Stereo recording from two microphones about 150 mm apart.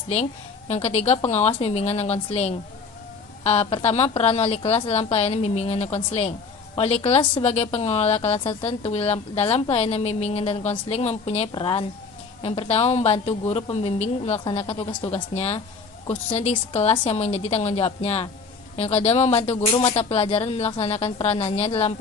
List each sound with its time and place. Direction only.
0.1 s a woman's voice: 45° left (ahead or behind)